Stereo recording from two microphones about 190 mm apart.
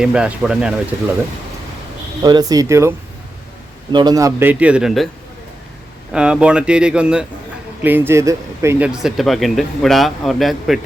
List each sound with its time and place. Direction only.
0.0 s speech: 5° right (ahead or behind)
2.2 s speech: 20° right (ahead or behind)
3.9 s a man's voice: 20° right (ahead or behind); by 5.0 s centre (ahead or behind)
6.1 s speech: 5° right (ahead or behind)